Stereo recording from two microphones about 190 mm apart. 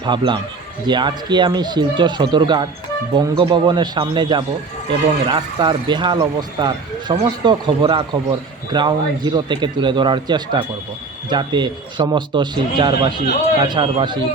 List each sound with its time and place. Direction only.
0.0 s speech: 25° right (ahead or behind)